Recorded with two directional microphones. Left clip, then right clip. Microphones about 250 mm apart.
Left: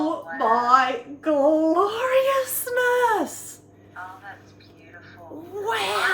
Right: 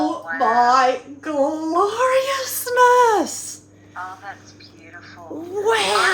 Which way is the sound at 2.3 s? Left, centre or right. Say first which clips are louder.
Even; right.